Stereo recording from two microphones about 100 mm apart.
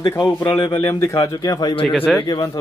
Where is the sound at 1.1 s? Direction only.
40° left (ahead or behind).